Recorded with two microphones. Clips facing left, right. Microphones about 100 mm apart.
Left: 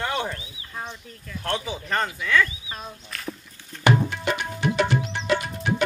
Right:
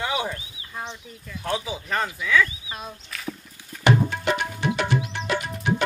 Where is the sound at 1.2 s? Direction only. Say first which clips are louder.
Even; 5° right (ahead or behind).